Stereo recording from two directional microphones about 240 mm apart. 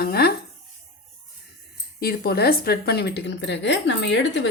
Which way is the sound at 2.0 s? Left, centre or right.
Left.